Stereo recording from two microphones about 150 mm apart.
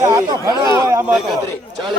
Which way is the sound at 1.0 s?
5° right (ahead or behind).